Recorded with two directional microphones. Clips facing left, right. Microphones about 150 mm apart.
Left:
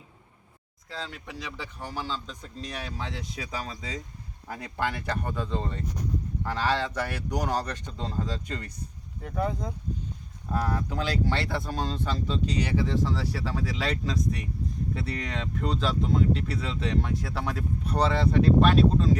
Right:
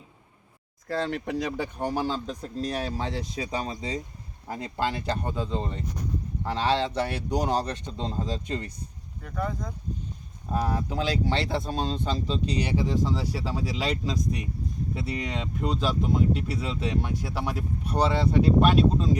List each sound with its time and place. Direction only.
0.9 s speech: 60° right (ahead or behind); by 8.7 s 25° right (ahead or behind)
10.5 s speech: 20° right (ahead or behind)